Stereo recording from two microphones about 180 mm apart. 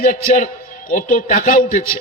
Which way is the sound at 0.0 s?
45° left (ahead or behind).